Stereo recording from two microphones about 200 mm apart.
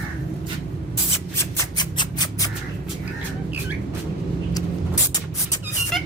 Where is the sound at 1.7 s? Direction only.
20° left (ahead or behind).